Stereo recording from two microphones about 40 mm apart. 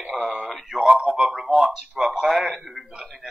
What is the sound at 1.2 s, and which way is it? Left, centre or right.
A man's voice, centre.